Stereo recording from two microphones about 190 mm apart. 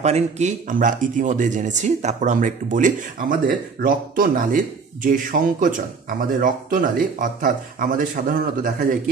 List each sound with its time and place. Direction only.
0.0 s speech: 35° right (ahead or behind)